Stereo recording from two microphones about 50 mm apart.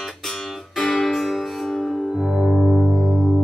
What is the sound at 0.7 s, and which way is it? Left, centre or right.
Music, centre.